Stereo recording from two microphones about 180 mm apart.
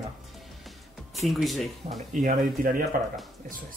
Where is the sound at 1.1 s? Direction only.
Centre (ahead or behind).